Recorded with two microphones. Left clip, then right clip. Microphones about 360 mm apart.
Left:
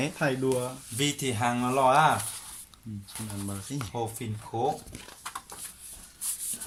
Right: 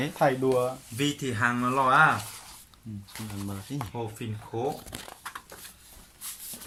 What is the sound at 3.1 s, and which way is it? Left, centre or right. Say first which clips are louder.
Speech: even; centre.